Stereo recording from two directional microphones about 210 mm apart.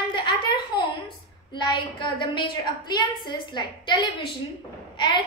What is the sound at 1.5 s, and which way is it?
A woman's voice, 20° left (ahead or behind).